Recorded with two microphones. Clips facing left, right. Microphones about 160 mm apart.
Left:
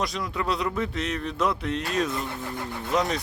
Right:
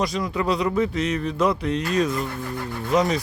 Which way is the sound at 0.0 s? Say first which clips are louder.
Right 5 dB; centre (ahead or behind).